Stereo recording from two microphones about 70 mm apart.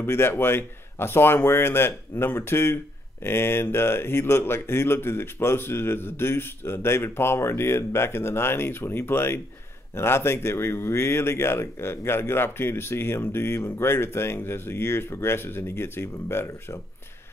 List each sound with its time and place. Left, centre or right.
0.0 s speech: left